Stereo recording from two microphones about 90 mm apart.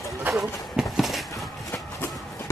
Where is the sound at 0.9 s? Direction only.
Centre (ahead or behind).